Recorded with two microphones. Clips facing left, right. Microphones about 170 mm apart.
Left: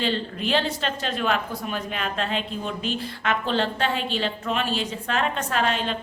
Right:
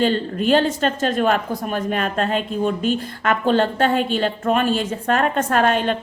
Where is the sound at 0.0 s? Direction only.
45° right (ahead or behind).